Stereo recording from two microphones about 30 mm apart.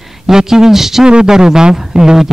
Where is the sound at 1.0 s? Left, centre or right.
Right.